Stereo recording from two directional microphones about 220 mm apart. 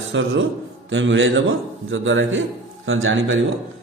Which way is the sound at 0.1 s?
55° right (ahead or behind).